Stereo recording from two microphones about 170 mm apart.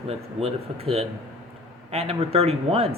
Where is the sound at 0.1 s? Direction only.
35° right (ahead or behind).